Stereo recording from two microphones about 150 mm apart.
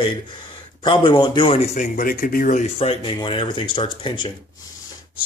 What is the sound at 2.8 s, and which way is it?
Speech, 35° left (ahead or behind).